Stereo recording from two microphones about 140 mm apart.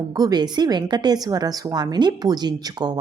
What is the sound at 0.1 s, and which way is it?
Speech, 30° right (ahead or behind).